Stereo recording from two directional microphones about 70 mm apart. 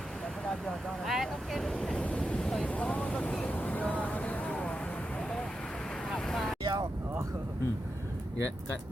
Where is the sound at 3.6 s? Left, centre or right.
Left.